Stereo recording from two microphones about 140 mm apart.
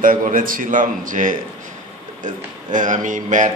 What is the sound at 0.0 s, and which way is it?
A man's voice, 75° right (ahead or behind).